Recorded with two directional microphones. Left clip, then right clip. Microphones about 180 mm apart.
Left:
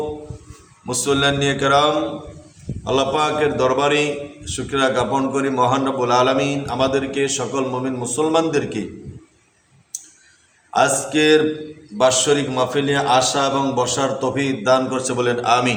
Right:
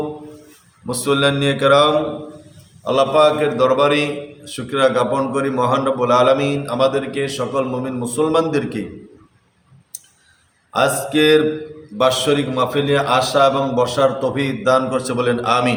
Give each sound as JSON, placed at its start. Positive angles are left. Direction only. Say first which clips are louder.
{"t": 0.9, "sound": "a man's voice", "louder": "right 1 dB", "side_deg": 10}
{"t": 10.7, "sound": "a man's voice", "louder": "even", "side_deg": 10}